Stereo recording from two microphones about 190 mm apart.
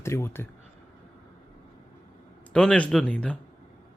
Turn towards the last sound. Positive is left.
turn(degrees=5)  # may be behind; listen again after turning